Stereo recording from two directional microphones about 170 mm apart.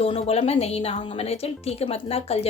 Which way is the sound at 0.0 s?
35° left (ahead or behind).